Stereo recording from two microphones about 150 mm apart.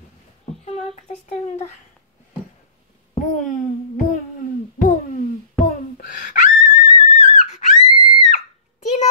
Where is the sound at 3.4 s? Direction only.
60° left (ahead or behind).